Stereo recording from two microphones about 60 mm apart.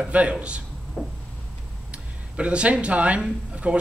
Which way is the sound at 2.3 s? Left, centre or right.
Centre.